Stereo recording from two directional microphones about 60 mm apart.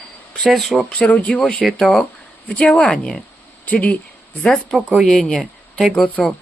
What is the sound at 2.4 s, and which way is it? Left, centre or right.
Speech, centre.